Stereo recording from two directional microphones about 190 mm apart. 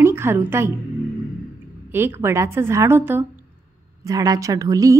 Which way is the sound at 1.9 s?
10° right (ahead or behind).